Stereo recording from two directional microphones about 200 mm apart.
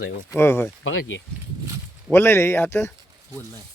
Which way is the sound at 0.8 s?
80° left.